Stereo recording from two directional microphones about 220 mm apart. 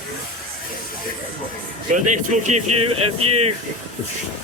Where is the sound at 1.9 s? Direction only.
30° right (ahead or behind).